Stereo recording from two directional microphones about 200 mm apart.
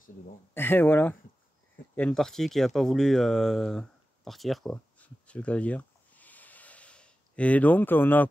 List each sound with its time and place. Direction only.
0.6 s speech: 10° left (ahead or behind)